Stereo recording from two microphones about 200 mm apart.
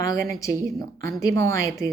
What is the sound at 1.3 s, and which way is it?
Speech, 15° left (ahead or behind).